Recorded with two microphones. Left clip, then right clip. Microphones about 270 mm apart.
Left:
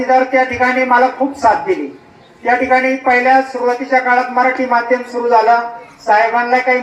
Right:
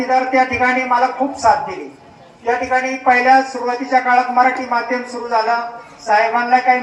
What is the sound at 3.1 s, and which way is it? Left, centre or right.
A man's voice, left.